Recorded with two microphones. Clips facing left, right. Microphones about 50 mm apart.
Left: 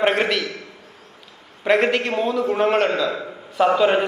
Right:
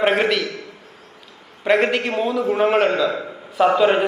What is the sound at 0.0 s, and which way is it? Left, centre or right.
Speech, centre.